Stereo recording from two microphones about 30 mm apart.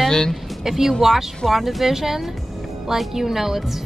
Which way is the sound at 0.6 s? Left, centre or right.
Centre.